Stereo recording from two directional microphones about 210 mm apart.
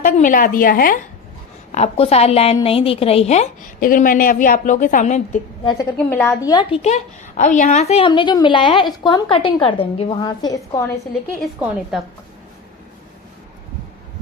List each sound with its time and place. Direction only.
0.0 s a woman's voice: 40° left (ahead or behind)
1.7 s a woman's voice: 30° left (ahead or behind)
5.7 s a woman's voice: 10° left (ahead or behind)